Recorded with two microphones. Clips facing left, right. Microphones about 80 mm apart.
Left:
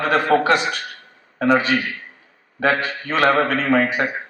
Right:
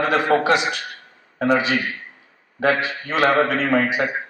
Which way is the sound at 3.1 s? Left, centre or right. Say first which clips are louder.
Left 1 dB; left.